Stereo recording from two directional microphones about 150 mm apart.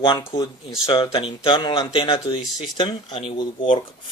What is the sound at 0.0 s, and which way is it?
Speech, 30° left (ahead or behind).